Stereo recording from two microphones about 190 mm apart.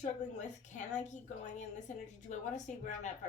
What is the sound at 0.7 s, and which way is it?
A woman's voice, 40° left (ahead or behind).